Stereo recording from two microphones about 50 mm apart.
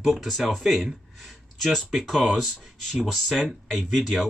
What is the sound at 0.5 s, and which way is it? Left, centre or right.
Speech, centre.